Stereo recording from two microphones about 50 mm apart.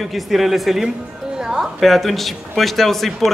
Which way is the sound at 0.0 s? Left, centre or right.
Centre.